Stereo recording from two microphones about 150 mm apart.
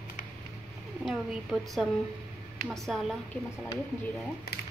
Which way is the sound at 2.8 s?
Centre (ahead or behind).